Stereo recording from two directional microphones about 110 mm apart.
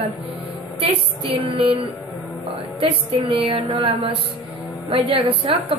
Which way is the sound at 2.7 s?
55° right (ahead or behind).